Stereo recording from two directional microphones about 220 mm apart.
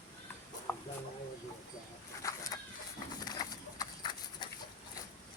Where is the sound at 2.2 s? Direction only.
15° left (ahead or behind).